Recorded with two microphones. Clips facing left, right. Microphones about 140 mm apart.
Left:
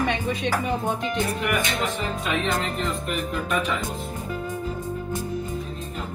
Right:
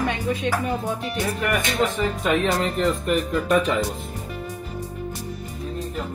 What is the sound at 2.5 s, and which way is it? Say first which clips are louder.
Music: right 5 dB; 40° right (ahead or behind).